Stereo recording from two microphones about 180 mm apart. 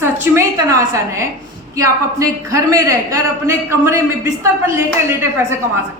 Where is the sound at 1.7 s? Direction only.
15° right (ahead or behind).